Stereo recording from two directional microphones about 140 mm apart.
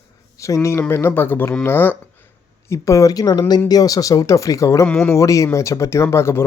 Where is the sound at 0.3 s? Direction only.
20° left (ahead or behind).